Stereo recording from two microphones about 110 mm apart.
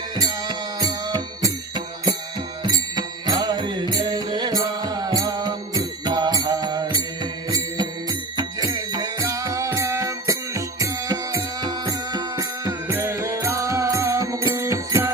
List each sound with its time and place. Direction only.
0.2 s music: 35° right (ahead or behind)
8.7 s music: 35° right (ahead or behind)